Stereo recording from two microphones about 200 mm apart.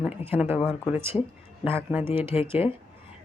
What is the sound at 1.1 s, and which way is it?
Speech, 15° left (ahead or behind).